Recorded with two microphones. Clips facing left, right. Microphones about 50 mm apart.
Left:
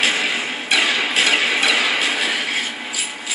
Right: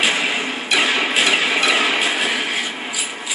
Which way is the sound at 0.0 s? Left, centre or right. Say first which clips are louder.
Even; right.